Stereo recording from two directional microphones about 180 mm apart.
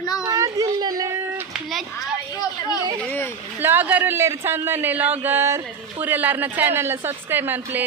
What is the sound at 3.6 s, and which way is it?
A man's voice, 10° right (ahead or behind).